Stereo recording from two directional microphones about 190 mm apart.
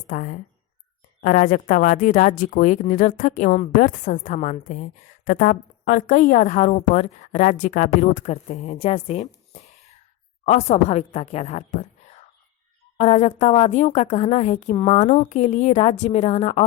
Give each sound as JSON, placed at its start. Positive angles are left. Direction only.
{"t": 0.1, "sound": "speech", "side_deg": 45}
{"t": 13.0, "sound": "speech", "side_deg": 35}